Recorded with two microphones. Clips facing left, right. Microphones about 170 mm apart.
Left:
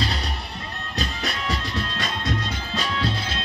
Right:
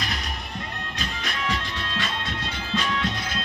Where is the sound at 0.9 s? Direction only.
40° left (ahead or behind).